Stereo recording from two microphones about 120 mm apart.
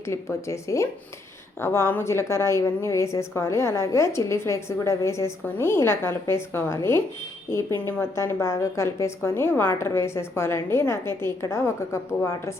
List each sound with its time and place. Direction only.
0.0 s a woman's voice: 25° left (ahead or behind)